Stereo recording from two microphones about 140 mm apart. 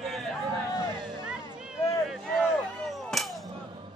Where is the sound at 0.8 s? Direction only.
30° right (ahead or behind).